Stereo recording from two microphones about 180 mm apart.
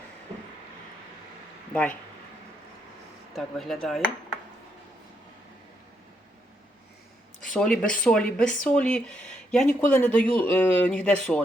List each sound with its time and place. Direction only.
3.3 s a man's voice: centre (ahead or behind)
7.4 s a man's voice: 5° left (ahead or behind)